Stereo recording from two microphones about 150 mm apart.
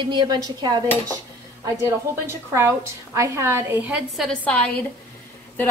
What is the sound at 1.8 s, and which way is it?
A woman's voice, 15° right (ahead or behind).